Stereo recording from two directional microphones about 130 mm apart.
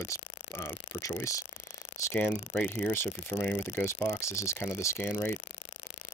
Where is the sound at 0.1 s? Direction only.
20° left (ahead or behind).